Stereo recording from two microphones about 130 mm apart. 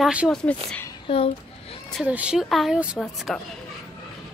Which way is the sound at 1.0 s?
45° left (ahead or behind).